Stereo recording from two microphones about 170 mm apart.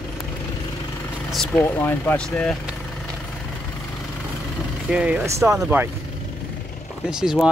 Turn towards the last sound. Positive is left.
turn(degrees=-5)  # may be behind; listen again after turning